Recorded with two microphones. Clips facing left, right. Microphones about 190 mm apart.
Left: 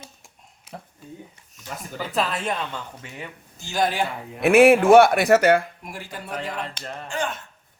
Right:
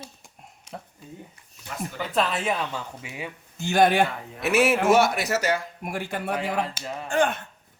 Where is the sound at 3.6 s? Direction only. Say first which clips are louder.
Right 4 dB; 60° right (ahead or behind).